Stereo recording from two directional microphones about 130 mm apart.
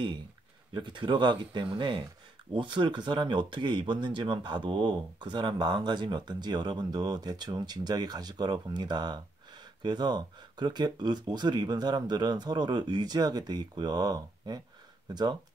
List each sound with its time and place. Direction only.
0.7 s speech: 35° right (ahead or behind)